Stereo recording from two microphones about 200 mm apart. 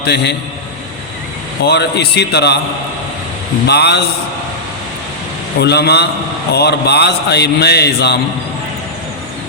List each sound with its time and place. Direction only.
0.0 s a man's voice: 55° left (ahead or behind)
1.6 s a man's voice: 55° left (ahead or behind)
3.7 s a man's voice: 55° left (ahead or behind)
5.5 s a man's voice: 55° left (ahead or behind)